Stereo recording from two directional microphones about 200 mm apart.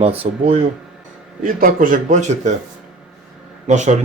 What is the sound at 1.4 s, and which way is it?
A man's voice, 45° right (ahead or behind).